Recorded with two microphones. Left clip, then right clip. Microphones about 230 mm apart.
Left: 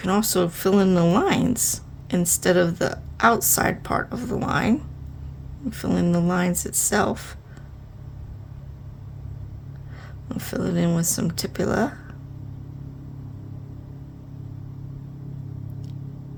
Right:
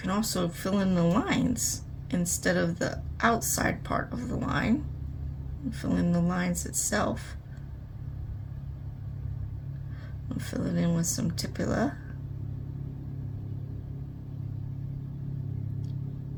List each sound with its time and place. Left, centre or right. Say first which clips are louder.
0.0 s a woman's voice: left 8 dB; left
10.2 s a woman's voice: left 7 dB; left